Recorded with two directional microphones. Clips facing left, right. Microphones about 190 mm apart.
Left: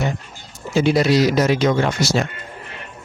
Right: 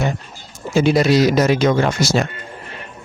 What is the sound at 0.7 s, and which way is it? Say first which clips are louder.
Speech: right 2 dB; 50° right (ahead or behind).